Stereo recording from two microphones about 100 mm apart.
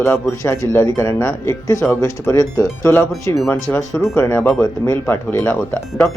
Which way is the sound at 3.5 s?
20° left (ahead or behind).